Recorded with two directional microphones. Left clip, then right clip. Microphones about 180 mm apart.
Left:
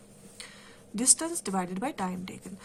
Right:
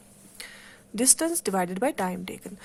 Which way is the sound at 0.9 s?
40° right (ahead or behind).